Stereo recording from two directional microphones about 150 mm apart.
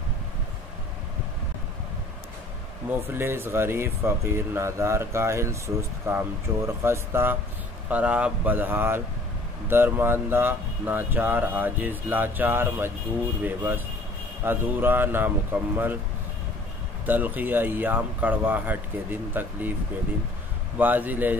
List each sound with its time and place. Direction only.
3.1 s speech: 15° right (ahead or behind)
17.0 s speech: 10° right (ahead or behind)
20.7 s speech: 10° right (ahead or behind)